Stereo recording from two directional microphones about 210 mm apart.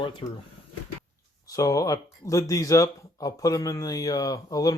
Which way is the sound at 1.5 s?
15° left (ahead or behind).